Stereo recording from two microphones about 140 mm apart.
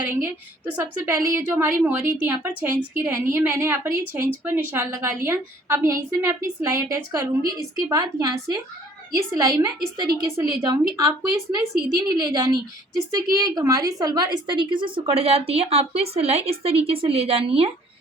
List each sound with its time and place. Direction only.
0.1 s a woman's voice: 15° right (ahead or behind); by 17.7 s 40° right (ahead or behind)